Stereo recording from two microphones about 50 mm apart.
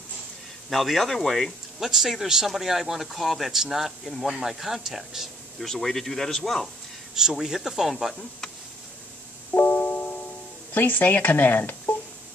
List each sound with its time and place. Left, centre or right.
0.7 s speech: centre
1.8 s speech: centre
5.7 s speech: centre
7.2 s speech: centre
9.5 s music: left
10.7 s speech: left